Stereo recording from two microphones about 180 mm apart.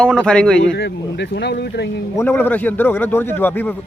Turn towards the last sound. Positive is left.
turn(degrees=10)  # may be behind; listen again after turning